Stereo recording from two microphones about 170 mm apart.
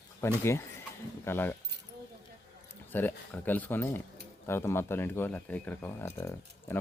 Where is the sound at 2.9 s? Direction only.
10° left (ahead or behind).